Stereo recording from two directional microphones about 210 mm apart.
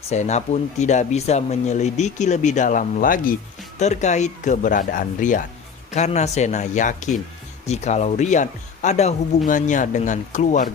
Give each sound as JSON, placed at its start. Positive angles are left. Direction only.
{"t": 0.1, "sound": "speech", "side_deg": 35}